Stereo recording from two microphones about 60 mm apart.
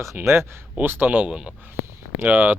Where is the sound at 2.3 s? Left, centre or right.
Right.